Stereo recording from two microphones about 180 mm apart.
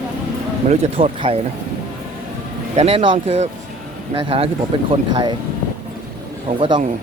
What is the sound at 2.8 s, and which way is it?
Speech, 35° right (ahead or behind).